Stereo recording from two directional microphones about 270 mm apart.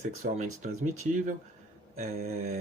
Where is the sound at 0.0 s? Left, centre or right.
Right.